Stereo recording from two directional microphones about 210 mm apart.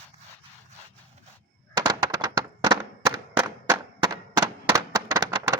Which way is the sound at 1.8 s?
20° right (ahead or behind).